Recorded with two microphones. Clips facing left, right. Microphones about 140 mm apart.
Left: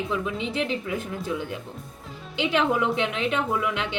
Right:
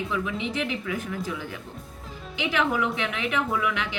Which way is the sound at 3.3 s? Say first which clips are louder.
Left 1 dB; 25° left (ahead or behind).